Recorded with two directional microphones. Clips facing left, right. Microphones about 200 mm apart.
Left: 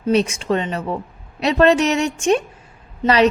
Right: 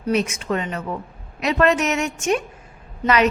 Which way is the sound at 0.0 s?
30° left (ahead or behind).